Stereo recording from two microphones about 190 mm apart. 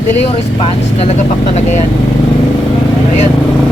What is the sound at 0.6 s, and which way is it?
Speech, 35° left (ahead or behind).